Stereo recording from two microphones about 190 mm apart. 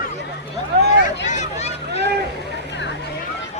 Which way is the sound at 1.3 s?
35° left (ahead or behind).